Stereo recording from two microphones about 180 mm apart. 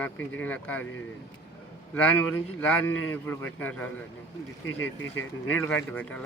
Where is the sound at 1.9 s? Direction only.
10° left (ahead or behind).